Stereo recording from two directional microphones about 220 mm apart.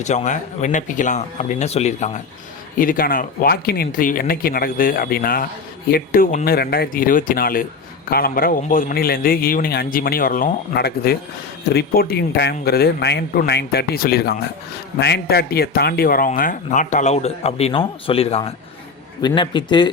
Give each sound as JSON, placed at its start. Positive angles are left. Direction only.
{"t": 0.0, "sound": "a man's voice", "side_deg": 30}